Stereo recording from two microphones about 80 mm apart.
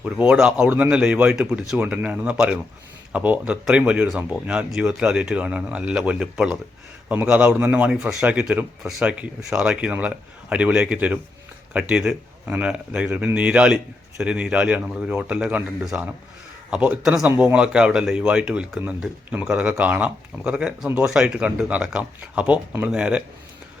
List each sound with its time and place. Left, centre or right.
0.0 s speech: centre
0.3 s speech: centre